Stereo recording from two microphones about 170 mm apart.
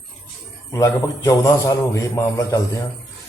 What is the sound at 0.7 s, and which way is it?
A man's voice, 20° left (ahead or behind).